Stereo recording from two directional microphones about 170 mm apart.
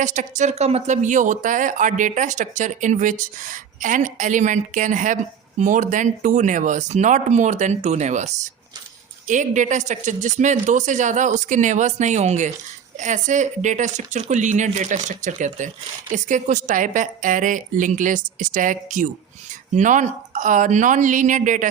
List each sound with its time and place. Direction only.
0.0 s speech: 45° right (ahead or behind)